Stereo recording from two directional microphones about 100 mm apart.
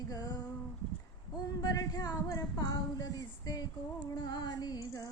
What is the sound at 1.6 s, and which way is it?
A woman's voice, 40° left (ahead or behind).